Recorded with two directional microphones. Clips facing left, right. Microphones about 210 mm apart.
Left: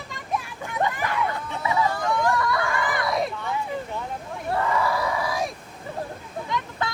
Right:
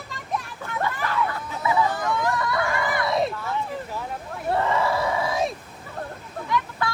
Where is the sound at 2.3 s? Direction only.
25° right (ahead or behind).